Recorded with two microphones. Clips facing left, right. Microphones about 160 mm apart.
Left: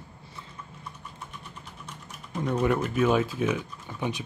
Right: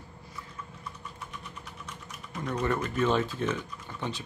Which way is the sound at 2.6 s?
10° left (ahead or behind).